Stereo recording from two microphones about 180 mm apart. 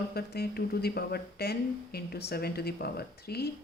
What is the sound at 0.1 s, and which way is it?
Speech, 60° left (ahead or behind).